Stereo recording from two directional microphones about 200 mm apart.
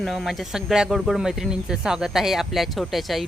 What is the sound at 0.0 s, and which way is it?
Speech, centre (ahead or behind).